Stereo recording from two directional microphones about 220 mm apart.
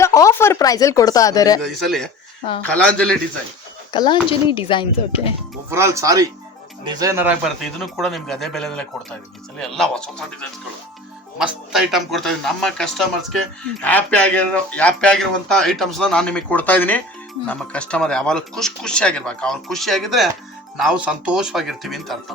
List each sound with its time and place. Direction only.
0.0 s speech: 15° left (ahead or behind)
1.6 s speech: centre (ahead or behind)
3.9 s speech: 20° left (ahead or behind)
5.7 s speech: 15° right (ahead or behind); by 10.2 s 5° left (ahead or behind)
11.3 s speech: centre (ahead or behind)